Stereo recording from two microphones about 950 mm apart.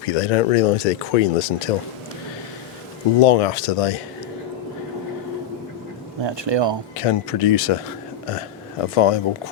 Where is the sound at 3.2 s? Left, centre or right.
Left.